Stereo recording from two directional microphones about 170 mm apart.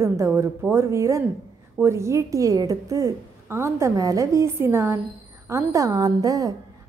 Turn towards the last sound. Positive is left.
turn(degrees=-20)  # may be behind; listen again after turning